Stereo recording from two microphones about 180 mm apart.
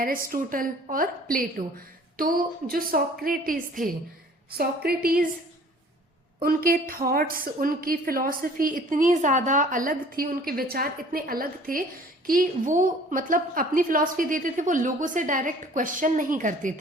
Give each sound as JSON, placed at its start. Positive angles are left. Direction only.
{"t": 0.0, "sound": "a woman's voice", "side_deg": -50}
{"t": 6.4, "sound": "a woman's voice", "side_deg": -55}